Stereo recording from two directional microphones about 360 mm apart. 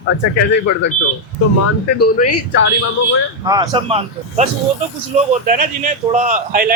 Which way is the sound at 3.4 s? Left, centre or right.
Centre.